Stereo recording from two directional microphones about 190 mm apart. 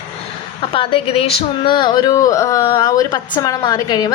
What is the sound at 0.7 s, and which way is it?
A woman's voice, 30° left (ahead or behind).